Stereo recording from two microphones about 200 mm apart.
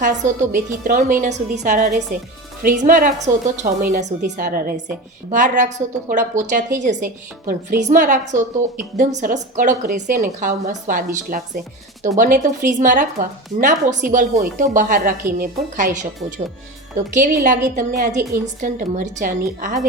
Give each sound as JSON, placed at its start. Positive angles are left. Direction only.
{"t": 0.0, "sound": "a woman's voice", "side_deg": -40}
{"t": 17.2, "sound": "speech", "side_deg": -40}